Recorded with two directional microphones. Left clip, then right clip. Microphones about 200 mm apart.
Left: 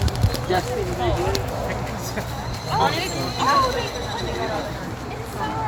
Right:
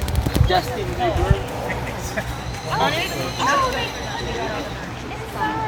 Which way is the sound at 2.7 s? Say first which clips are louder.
Even; 60° left (ahead or behind).